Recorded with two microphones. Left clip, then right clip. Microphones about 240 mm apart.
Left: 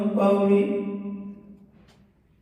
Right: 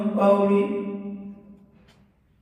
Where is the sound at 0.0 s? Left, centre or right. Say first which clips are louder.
Right 2 dB; centre.